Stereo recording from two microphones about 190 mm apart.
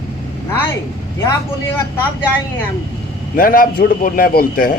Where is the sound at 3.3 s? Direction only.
45° left (ahead or behind).